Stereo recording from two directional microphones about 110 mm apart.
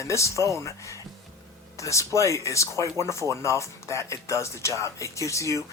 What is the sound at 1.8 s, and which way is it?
Speech, 25° left (ahead or behind).